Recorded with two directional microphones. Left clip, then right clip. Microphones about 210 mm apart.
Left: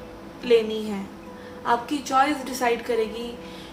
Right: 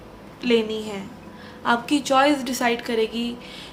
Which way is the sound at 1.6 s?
45° right (ahead or behind).